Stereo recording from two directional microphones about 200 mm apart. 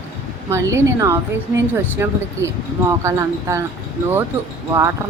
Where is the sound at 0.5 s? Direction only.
15° right (ahead or behind).